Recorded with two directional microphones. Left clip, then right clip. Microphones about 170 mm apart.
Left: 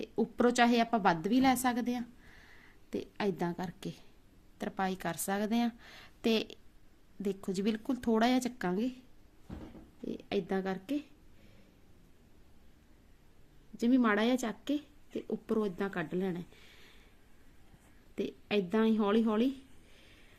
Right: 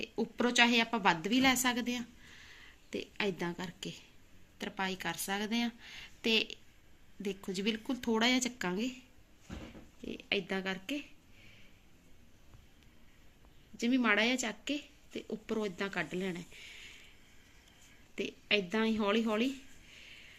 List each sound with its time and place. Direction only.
0.0 s a woman's voice: 55° left (ahead or behind)
10.1 s speech: 55° left (ahead or behind)
13.7 s speech: 65° left (ahead or behind)
16.1 s a sound: 60° left (ahead or behind)
18.1 s speech: 65° left (ahead or behind)